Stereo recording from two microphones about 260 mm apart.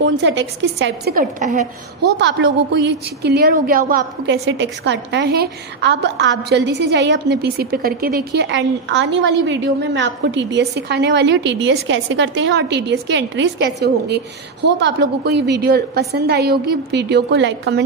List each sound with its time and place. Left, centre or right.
0.0 s a woman's voice: right